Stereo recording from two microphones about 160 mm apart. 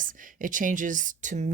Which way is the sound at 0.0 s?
55° right (ahead or behind).